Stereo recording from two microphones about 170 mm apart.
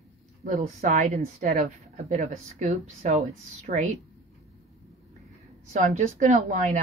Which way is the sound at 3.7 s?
60° right (ahead or behind).